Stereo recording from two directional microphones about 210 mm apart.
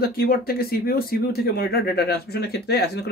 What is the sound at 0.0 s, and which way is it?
Speech, 45° left (ahead or behind).